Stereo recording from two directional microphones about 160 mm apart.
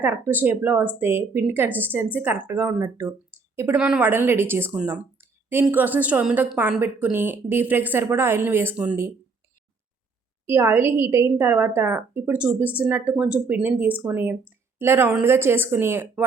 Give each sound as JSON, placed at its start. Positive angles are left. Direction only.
{"t": 0.0, "sound": "a woman's voice", "side_deg": -10}
{"t": 3.8, "sound": "a woman's voice", "side_deg": -5}
{"t": 10.4, "sound": "a woman's voice", "side_deg": -15}